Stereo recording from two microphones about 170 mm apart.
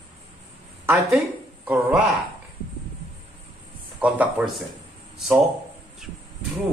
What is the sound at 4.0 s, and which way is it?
Speech, 5° right (ahead or behind).